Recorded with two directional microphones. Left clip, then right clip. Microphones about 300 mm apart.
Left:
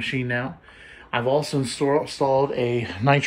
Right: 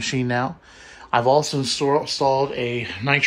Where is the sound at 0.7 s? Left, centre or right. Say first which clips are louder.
Right 1 dB; right.